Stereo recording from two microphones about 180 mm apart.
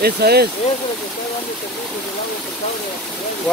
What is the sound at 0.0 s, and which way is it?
Speech, 60° right (ahead or behind).